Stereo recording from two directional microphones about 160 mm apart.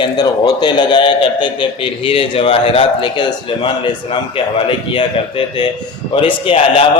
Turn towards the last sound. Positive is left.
turn(degrees=35)  # may be behind; listen again after turning